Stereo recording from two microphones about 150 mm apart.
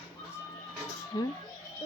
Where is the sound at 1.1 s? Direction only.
25° left (ahead or behind).